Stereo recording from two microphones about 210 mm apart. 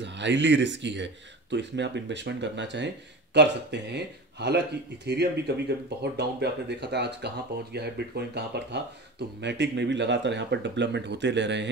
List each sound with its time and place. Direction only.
0.0 s speech: 60° right (ahead or behind)